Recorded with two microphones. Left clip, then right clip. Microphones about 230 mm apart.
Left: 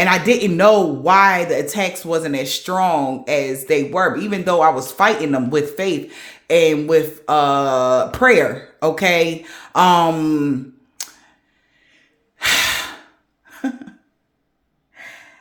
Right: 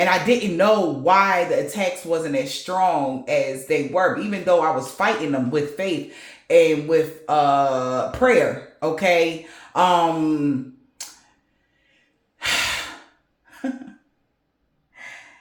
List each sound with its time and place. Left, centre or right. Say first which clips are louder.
0.0 s speech: left 3 dB; left
11.0 s camera: left 5 dB; left
12.4 s breathing: left 5 dB; left